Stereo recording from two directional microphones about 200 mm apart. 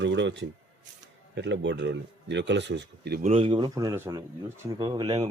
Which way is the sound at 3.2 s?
30° right (ahead or behind).